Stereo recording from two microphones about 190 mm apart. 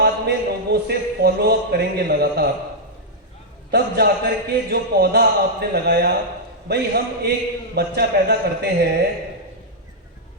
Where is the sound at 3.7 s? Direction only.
60° right (ahead or behind).